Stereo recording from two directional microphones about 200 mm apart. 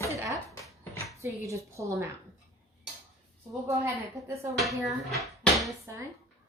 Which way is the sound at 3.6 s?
15° right (ahead or behind).